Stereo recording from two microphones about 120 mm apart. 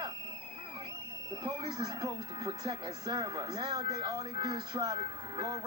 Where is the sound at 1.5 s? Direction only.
35° right (ahead or behind).